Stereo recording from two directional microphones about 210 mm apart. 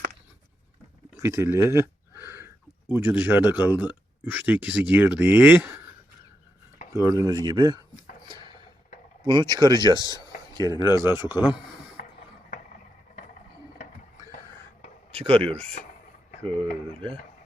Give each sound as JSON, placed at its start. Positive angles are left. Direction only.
{"t": 1.2, "sound": "a sound", "side_deg": -15}
{"t": 2.9, "sound": "speech", "side_deg": -10}
{"t": 6.9, "sound": "speech", "side_deg": -15}
{"t": 8.3, "sound": "a sound", "side_deg": -20}
{"t": 9.2, "sound": "speech", "side_deg": -20}
{"t": 10.0, "sound": "speech", "side_deg": 15}
{"t": 10.5, "sound": "speech", "side_deg": -20}
{"t": 15.1, "sound": "a sound", "side_deg": -25}
{"t": 15.8, "sound": "speech", "side_deg": 35}
{"t": 16.6, "sound": "speech", "side_deg": -25}